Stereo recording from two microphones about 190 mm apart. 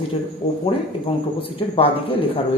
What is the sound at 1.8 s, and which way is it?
Speech, 30° left (ahead or behind).